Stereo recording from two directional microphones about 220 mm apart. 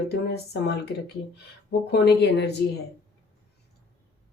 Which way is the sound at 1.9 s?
50° left (ahead or behind).